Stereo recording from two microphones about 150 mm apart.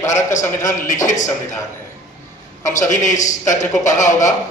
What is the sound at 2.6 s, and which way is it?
A man's voice, 55° left (ahead or behind).